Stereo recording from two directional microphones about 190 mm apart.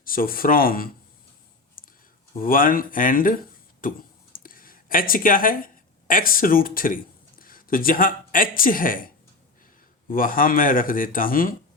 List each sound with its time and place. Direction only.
0.0 s speech: 50° left (ahead or behind)
1.8 s a sound: 50° left (ahead or behind)
2.4 s speech: 45° left (ahead or behind)